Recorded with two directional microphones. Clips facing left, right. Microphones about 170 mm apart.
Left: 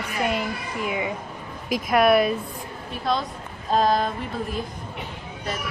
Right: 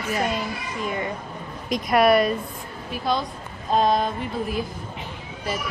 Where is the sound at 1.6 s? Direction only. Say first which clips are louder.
Right 1 dB; 5° left (ahead or behind).